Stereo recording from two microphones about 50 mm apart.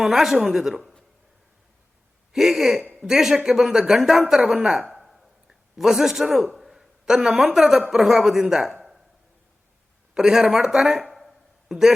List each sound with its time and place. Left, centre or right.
0.0 s a woman's voice: centre
2.3 s a woman's voice: centre
4.8 s a sound: centre
5.7 s a man's voice: centre
10.2 s a woman's voice: centre
11.0 s a sound: centre